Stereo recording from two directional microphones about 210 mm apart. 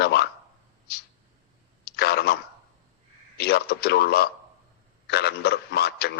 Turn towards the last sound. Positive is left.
turn(degrees=50)  # may be behind; listen again after turning